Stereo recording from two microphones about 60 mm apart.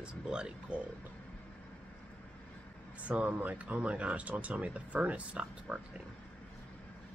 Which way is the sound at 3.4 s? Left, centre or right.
Right.